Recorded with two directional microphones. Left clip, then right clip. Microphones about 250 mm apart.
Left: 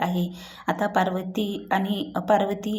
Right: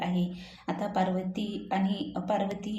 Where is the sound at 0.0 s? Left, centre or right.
Left.